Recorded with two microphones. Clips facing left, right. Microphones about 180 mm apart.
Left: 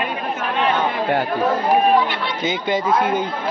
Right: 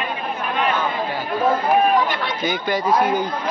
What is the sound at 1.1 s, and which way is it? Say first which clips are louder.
Speech: left 2 dB; 65° left (ahead or behind).